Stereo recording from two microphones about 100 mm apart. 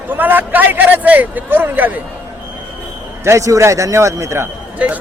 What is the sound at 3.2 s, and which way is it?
A man's voice, 30° right (ahead or behind).